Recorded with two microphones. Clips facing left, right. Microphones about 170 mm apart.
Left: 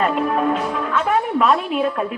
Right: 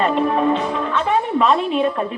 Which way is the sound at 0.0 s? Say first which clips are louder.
Right 2 dB; 5° left (ahead or behind).